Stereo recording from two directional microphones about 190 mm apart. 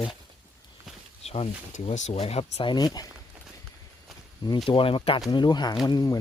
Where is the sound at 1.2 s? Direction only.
35° left (ahead or behind).